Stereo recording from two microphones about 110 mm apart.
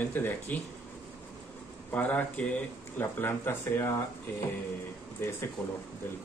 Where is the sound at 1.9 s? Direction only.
15° left (ahead or behind).